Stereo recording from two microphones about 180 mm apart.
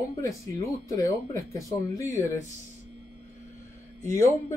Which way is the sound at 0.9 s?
20° left (ahead or behind).